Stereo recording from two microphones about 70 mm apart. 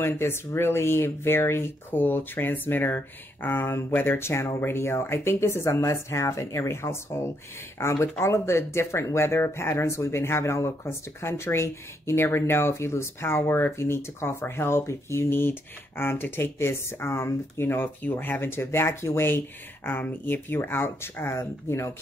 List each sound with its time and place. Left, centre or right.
0.0 s speech: left